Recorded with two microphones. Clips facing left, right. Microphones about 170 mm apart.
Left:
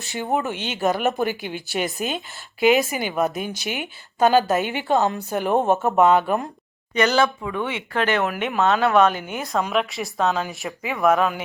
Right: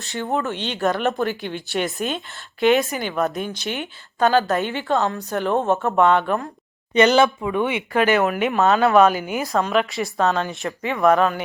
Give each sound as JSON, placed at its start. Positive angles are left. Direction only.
{"t": 0.2, "sound": "speech", "side_deg": 15}
{"t": 6.0, "sound": "speech", "side_deg": 5}
{"t": 6.9, "sound": "speech", "side_deg": -20}